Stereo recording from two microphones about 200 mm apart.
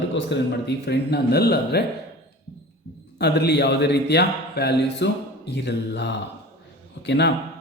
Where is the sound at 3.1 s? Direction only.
55° left (ahead or behind).